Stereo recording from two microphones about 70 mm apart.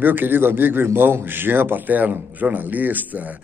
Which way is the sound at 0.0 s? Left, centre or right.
Right.